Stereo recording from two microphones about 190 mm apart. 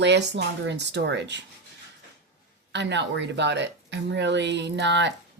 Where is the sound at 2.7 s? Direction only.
65° right (ahead or behind).